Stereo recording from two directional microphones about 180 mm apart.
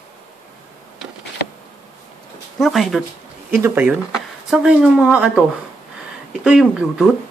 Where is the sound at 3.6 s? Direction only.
10° right (ahead or behind).